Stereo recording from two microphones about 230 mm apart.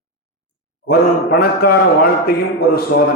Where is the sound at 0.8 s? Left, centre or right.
Left.